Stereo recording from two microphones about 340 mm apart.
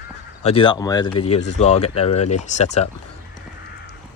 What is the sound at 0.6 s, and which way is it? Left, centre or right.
Speech, centre.